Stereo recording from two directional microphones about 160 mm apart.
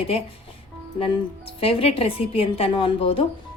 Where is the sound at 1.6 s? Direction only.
35° left (ahead or behind).